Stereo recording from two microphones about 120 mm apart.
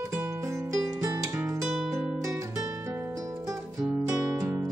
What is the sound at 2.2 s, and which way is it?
Music, 25° right (ahead or behind).